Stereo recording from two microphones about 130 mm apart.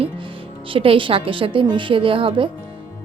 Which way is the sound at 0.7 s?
45° right (ahead or behind).